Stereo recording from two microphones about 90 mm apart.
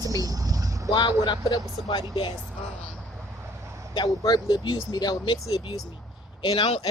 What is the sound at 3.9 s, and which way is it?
Speech, 55° left (ahead or behind).